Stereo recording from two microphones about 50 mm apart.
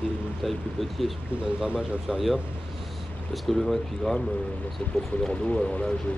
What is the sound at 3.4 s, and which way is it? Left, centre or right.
Speech, centre.